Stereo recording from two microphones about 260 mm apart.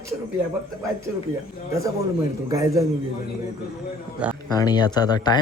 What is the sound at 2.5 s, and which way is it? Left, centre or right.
Speech, centre.